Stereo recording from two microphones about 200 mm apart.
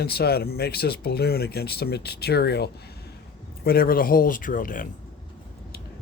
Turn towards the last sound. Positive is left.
turn(degrees=40)  # may be behind; listen again after turning